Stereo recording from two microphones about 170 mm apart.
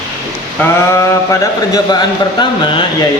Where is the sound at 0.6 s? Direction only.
10° left (ahead or behind); by 2.8 s 30° left (ahead or behind).